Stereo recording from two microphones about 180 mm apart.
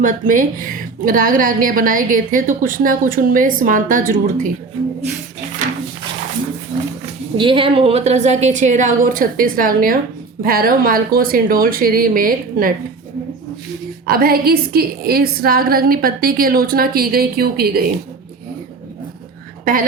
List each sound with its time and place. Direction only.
0.0 s a woman's voice: 45° right (ahead or behind)
7.3 s a woman's voice: 30° right (ahead or behind); by 12.7 s 50° right (ahead or behind)
14.0 s a woman's voice: 55° right (ahead or behind)